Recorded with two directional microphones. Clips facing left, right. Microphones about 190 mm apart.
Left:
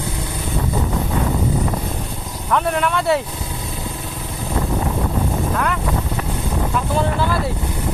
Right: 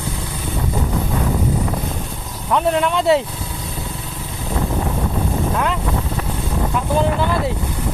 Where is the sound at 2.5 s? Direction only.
20° right (ahead or behind).